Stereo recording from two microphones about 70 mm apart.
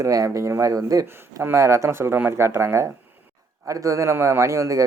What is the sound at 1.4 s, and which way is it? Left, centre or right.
Speech, right.